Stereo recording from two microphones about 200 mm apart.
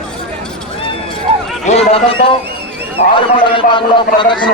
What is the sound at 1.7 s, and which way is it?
A man's voice, 30° left (ahead or behind).